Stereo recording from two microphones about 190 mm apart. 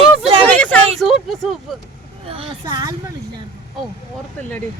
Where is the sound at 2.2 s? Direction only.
30° right (ahead or behind).